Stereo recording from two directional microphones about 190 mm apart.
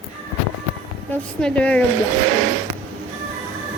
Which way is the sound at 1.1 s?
5° left (ahead or behind).